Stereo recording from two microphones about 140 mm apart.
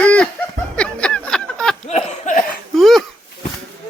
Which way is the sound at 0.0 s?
10° left (ahead or behind).